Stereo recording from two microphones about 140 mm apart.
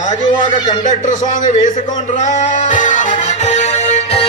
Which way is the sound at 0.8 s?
65° left (ahead or behind).